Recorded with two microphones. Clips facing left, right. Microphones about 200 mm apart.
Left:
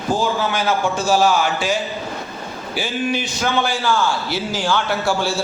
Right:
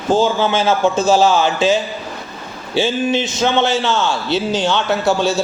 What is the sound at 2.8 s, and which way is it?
A man's voice, 25° right (ahead or behind).